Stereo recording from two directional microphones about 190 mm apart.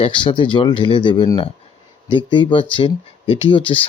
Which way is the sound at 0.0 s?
25° left (ahead or behind).